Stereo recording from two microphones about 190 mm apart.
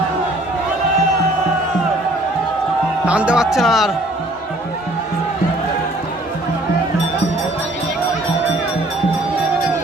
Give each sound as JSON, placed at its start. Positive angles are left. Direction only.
{"t": 3.1, "sound": "speech", "side_deg": -5}